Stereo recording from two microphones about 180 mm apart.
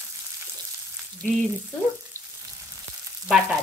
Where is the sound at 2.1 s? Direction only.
15° right (ahead or behind).